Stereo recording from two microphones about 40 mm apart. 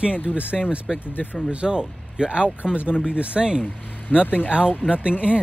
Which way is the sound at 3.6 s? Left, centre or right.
Left.